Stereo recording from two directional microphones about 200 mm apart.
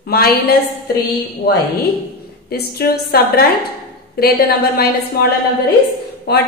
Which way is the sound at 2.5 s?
50° left (ahead or behind).